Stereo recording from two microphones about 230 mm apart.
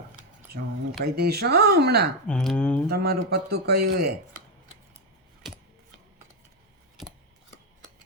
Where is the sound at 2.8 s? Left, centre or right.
Right.